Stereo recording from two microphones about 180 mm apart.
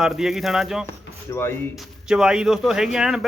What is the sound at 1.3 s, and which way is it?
Speech, 15° left (ahead or behind).